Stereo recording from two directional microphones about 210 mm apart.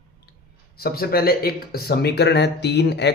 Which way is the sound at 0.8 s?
45° left (ahead or behind).